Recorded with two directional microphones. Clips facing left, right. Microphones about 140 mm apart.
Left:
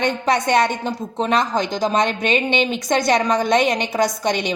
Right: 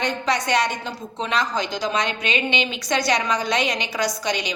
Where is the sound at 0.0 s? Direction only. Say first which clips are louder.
Left 4 dB; 50° left (ahead or behind).